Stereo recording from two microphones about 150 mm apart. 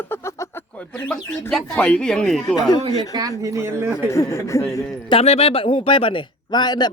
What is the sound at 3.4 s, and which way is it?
Speech, 20° right (ahead or behind).